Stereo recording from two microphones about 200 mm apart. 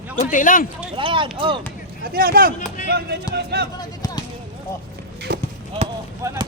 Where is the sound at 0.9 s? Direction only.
25° right (ahead or behind).